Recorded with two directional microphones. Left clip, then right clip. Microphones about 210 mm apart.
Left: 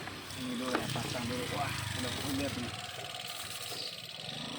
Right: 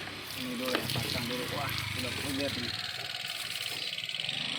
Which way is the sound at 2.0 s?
15° left (ahead or behind).